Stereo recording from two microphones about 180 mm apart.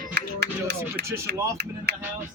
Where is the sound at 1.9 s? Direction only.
65° right (ahead or behind).